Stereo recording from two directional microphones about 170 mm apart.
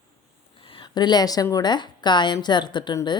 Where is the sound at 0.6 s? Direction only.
30° left (ahead or behind).